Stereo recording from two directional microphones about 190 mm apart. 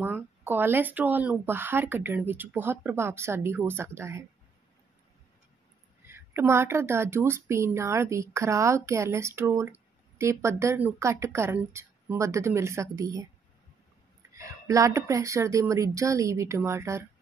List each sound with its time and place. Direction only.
0.0 s speech: 10° right (ahead or behind)
6.0 s speech: 15° right (ahead or behind)
14.3 s speech: 15° right (ahead or behind)